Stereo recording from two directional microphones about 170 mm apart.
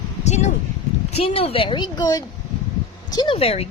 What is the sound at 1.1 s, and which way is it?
A woman's voice, 35° left (ahead or behind).